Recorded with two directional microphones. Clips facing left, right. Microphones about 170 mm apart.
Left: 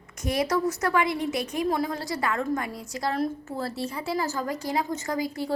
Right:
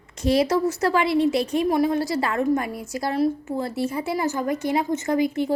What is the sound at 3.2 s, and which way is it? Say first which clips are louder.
Speech: right 6 dB; 15° right (ahead or behind).